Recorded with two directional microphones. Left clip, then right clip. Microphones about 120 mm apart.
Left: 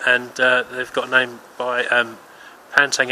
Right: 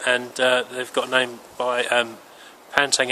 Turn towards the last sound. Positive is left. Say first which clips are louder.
# left 3 dB
turn(degrees=-20)  # may be behind; listen again after turning